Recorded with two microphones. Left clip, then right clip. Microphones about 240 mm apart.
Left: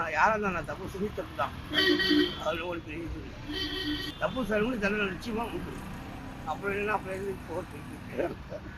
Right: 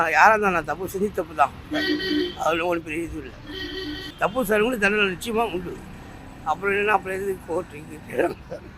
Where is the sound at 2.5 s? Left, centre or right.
Right.